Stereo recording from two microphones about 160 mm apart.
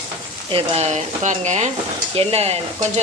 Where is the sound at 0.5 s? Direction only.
40° right (ahead or behind).